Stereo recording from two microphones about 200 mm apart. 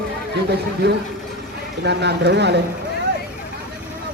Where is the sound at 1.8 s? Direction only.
55° right (ahead or behind).